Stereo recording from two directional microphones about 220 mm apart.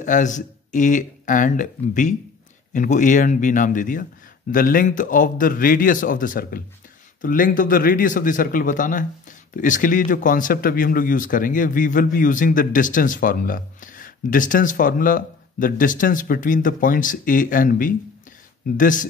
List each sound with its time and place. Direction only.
0.0 s speech: 35° left (ahead or behind)